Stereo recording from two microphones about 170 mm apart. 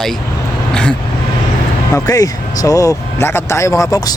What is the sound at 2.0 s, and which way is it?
Speech, 20° left (ahead or behind).